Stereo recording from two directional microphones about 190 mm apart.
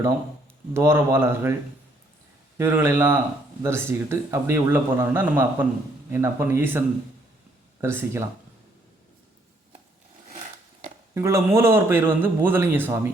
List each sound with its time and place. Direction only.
0.7 s speech: 15° right (ahead or behind)
2.6 s speech: 10° right (ahead or behind)
11.1 s speech: 15° right (ahead or behind)